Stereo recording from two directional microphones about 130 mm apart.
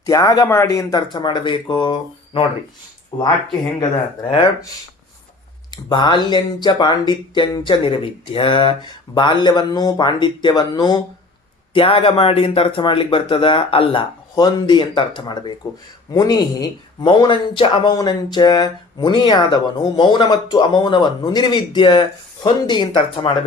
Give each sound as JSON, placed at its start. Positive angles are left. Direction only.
{"t": 0.0, "sound": "speech", "side_deg": 25}
{"t": 3.1, "sound": "speech", "side_deg": 25}
{"t": 5.7, "sound": "speech", "side_deg": 35}
{"t": 11.7, "sound": "speech", "side_deg": 45}